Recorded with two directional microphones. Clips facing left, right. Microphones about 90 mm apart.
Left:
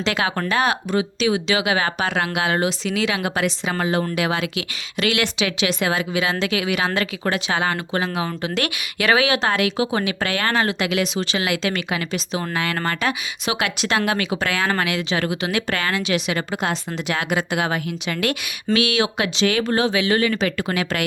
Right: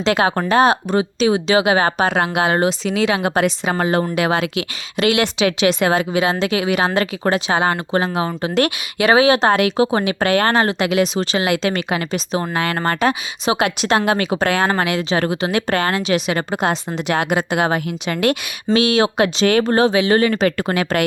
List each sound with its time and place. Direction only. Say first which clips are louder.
0.0 s speech: right 5 dB; 35° right (ahead or behind)
17.1 s speech: right 4 dB; 55° right (ahead or behind)